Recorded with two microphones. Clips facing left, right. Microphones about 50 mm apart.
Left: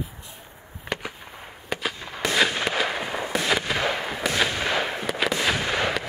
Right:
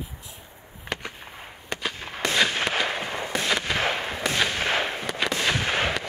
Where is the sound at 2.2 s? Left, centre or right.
Centre.